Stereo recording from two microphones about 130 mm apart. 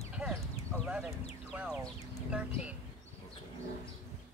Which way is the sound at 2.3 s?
10° right (ahead or behind).